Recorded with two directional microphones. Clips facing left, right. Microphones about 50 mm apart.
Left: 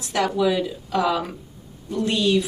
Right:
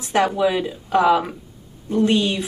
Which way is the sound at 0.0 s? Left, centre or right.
Right.